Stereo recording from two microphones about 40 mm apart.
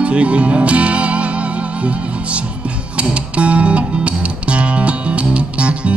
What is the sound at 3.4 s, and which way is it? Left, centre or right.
Music, right.